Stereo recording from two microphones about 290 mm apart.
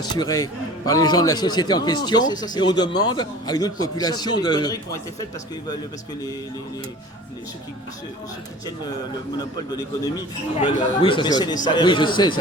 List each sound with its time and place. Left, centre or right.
0.0 s a man's voice: centre
2.9 s a man's voice: left
3.2 s a man's voice: centre
9.4 s a man's voice: centre